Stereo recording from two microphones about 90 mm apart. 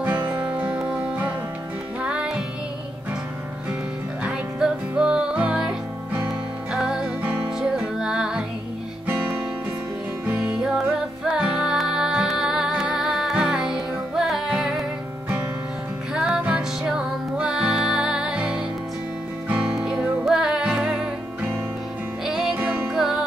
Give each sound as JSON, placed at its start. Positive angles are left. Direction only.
{"t": 0.0, "sound": "music", "side_deg": -20}
{"t": 4.2, "sound": "music", "side_deg": -10}
{"t": 9.0, "sound": "guitar", "side_deg": -25}
{"t": 10.6, "sound": "music", "side_deg": -5}
{"t": 16.1, "sound": "music", "side_deg": -10}
{"t": 19.7, "sound": "music", "side_deg": -5}
{"t": 22.6, "sound": "music", "side_deg": -20}
{"t": 22.9, "sound": "music", "side_deg": -5}